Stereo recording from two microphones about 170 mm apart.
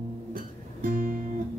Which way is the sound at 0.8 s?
55° right (ahead or behind).